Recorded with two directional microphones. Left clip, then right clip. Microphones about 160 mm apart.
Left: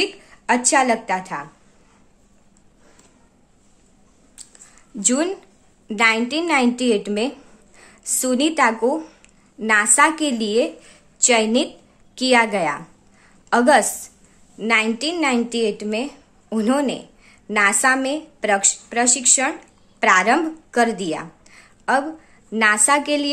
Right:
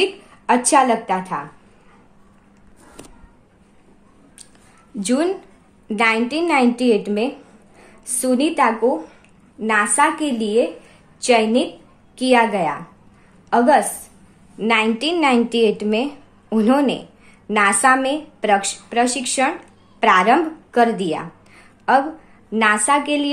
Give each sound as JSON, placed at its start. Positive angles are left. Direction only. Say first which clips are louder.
{"t": 0.0, "sound": "a woman's voice", "louder": "right 3 dB", "side_deg": 15}
{"t": 5.0, "sound": "a woman's voice", "louder": "right 1 dB", "side_deg": 20}